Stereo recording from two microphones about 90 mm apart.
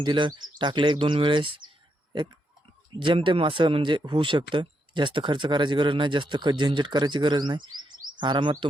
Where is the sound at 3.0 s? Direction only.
65° right (ahead or behind).